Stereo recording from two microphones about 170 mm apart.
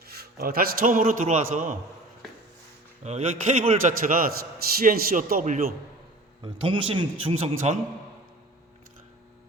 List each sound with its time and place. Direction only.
0.2 s a man's voice: 65° right (ahead or behind); by 1.7 s 45° right (ahead or behind)
3.0 s a man's voice: 40° right (ahead or behind)
4.0 s a man's voice: 55° right (ahead or behind)
6.4 s a man's voice: 30° right (ahead or behind)